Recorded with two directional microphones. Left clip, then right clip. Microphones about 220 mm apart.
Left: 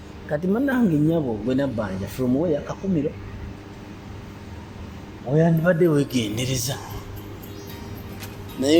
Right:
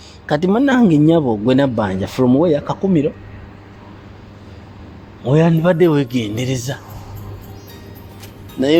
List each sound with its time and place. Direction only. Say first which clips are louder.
0.3 s speech: right 8 dB; 45° right (ahead or behind)
5.3 s a man's voice: right 5 dB; 50° right (ahead or behind); by 6.7 s 30° right (ahead or behind)